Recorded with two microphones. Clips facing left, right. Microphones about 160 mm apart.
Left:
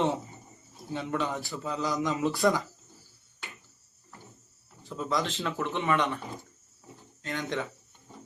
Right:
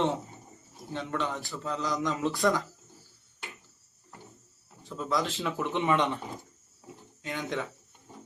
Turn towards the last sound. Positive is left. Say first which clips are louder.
# left 1 dB
turn(degrees=-5)  # may be behind; listen again after turning